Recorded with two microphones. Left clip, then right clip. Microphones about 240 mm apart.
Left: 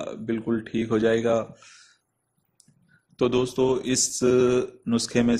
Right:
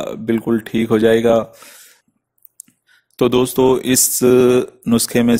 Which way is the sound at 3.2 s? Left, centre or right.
Right.